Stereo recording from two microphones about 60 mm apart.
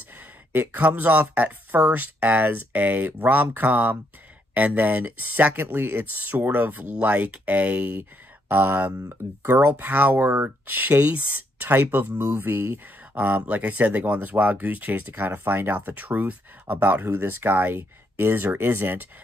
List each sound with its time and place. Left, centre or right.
0.5 s speech: right
13.1 s speech: right